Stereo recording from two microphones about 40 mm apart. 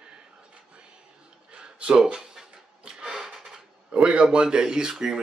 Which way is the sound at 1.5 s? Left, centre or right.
Right.